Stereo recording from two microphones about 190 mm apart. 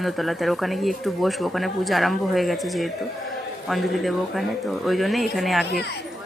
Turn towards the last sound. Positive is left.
turn(degrees=60)  # may be behind; listen again after turning